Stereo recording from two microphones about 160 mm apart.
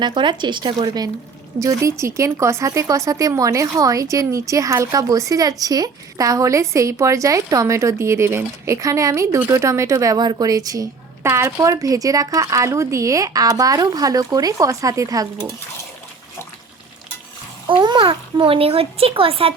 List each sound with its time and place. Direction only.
0.0 s speech: 30° right (ahead or behind)
17.7 s a child's voice: 30° right (ahead or behind)